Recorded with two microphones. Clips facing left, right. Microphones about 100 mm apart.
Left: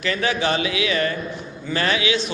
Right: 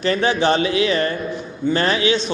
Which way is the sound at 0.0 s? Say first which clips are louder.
Right 5 dB; 35° right (ahead or behind).